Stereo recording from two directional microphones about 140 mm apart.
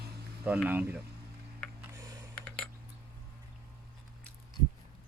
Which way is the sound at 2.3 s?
10° left (ahead or behind).